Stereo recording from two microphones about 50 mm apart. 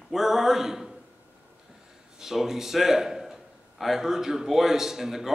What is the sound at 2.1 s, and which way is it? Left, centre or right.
A man's voice, centre.